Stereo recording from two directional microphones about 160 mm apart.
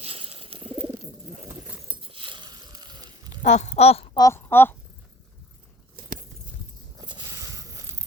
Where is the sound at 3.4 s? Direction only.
50° left (ahead or behind).